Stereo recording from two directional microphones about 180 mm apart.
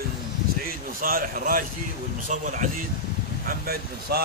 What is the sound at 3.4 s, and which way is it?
Speech, 55° right (ahead or behind).